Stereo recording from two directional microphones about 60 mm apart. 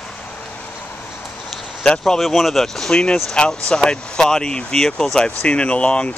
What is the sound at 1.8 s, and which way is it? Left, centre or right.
Speech, centre.